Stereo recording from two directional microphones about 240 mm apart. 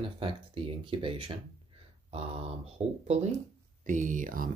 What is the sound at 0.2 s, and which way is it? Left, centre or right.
Speech, right.